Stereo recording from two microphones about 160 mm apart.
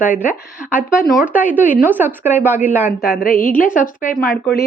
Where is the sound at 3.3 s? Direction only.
60° left (ahead or behind).